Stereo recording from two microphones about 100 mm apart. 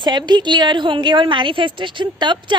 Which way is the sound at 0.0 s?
45° right (ahead or behind).